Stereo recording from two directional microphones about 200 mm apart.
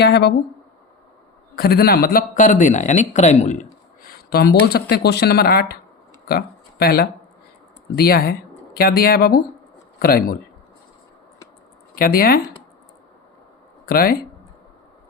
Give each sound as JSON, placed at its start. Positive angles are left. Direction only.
{"t": 0.0, "sound": "speech", "side_deg": 55}
{"t": 1.5, "sound": "a man's voice", "side_deg": 50}
{"t": 4.1, "sound": "speech", "side_deg": 50}
{"t": 11.9, "sound": "speech", "side_deg": 45}
{"t": 13.8, "sound": "speech", "side_deg": 45}